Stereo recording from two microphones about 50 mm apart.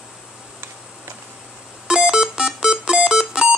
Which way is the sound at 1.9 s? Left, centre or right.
Centre.